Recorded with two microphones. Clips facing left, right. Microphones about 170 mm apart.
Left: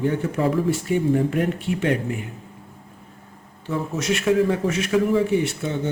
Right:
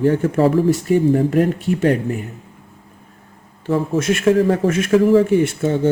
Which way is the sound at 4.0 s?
50° right (ahead or behind).